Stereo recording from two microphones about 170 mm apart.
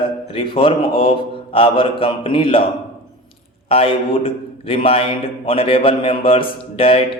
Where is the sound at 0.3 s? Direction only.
30° left (ahead or behind).